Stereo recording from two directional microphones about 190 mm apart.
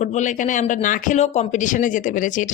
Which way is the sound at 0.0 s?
40° left (ahead or behind).